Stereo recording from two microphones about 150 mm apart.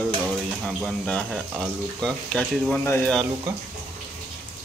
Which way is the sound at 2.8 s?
15° left (ahead or behind).